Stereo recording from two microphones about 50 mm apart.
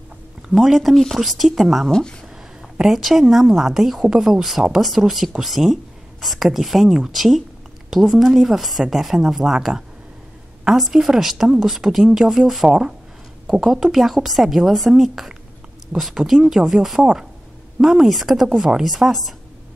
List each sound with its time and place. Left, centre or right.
0.5 s a woman's voice: centre
1.9 s speech: centre
2.8 s a woman's voice: centre
11.4 s speech: centre
11.7 s a woman's voice: centre
13.5 s a woman's voice: centre
17.0 s a woman's voice: centre